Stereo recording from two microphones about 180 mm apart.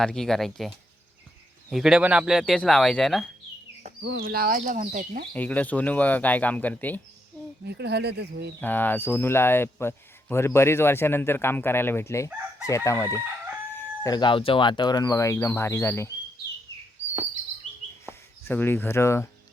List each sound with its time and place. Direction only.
0.0 s speech: centre (ahead or behind)
1.7 s speech: 5° right (ahead or behind)
4.2 s speech: 55° right (ahead or behind)
5.3 s speech: 10° left (ahead or behind)
7.7 s speech: 65° right (ahead or behind)
8.6 s speech: 10° left (ahead or behind)
18.0 s speech: 10° left (ahead or behind)